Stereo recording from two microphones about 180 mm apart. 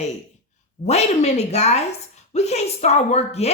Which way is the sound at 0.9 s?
35° left (ahead or behind).